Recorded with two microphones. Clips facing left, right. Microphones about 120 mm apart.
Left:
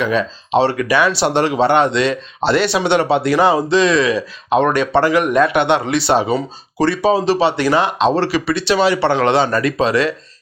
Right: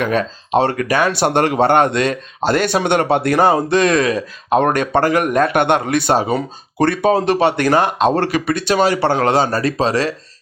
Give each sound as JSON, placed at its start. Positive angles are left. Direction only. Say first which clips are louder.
{"t": 0.0, "sound": "speech", "louder": "even", "side_deg": -50}